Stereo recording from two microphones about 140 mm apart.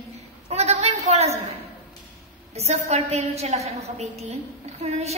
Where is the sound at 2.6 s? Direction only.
50° right (ahead or behind).